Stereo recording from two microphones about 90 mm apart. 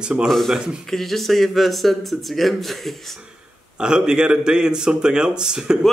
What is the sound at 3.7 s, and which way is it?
Speech, 10° right (ahead or behind).